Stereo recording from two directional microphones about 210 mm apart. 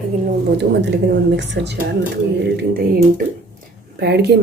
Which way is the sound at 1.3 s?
55° right (ahead or behind).